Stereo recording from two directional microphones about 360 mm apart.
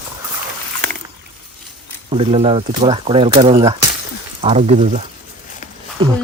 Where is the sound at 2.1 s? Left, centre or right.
Centre.